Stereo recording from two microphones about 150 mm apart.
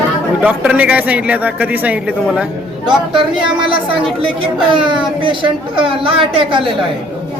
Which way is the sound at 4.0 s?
35° right (ahead or behind).